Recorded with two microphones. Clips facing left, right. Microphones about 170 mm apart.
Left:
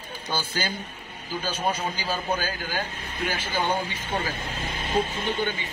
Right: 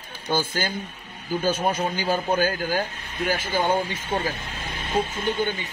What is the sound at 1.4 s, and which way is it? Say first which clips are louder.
A man's voice: right 4 dB; 50° right (ahead or behind).